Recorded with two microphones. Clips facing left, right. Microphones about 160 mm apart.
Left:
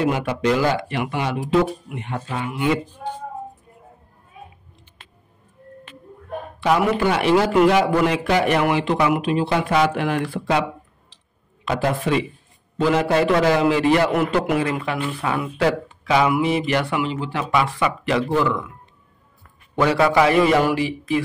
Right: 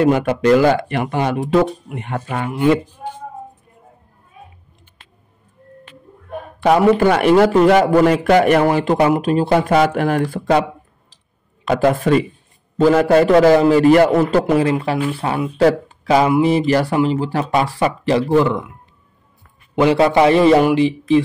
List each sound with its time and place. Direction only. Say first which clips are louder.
0.0 s a man's voice: right 6 dB; 50° right (ahead or behind)
6.6 s a man's voice: right 6 dB; 50° right (ahead or behind)
11.6 s a man's voice: right 6 dB; 50° right (ahead or behind); by 18.6 s 35° right (ahead or behind)
19.9 s a man's voice: right 4 dB; 30° right (ahead or behind)